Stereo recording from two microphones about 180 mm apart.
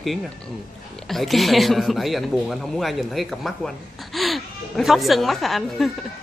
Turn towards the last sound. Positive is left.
turn(degrees=0)  # may be behind; listen again after turning